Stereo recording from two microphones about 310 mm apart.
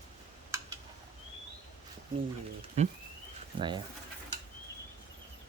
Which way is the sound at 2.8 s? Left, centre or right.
Right.